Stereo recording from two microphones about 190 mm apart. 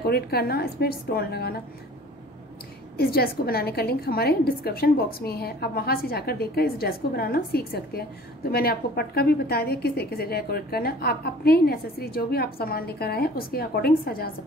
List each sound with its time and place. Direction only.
0.0 s a woman's voice: 55° left (ahead or behind)
3.0 s a woman's voice: 55° left (ahead or behind)